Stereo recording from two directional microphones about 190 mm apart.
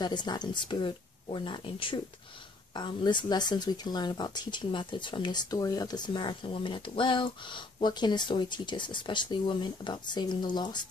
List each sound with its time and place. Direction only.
0.0 s speech: 25° left (ahead or behind)